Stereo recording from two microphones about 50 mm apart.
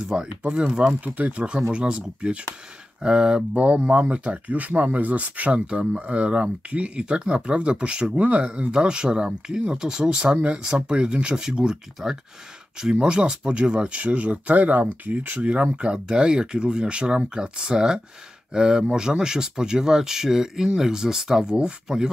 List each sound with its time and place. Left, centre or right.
0.0 s speech: centre
1.0 s speech: right
10.6 s speech: centre